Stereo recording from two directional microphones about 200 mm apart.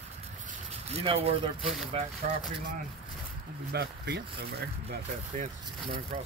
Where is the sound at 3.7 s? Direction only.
55° right (ahead or behind).